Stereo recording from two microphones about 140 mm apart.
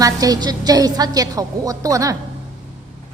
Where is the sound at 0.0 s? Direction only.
25° right (ahead or behind).